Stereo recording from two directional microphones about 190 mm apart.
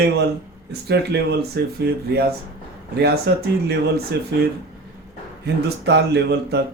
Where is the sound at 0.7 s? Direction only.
60° right (ahead or behind).